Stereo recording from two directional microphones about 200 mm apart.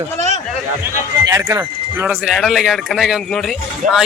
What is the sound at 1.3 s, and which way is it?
A man's voice, 15° right (ahead or behind).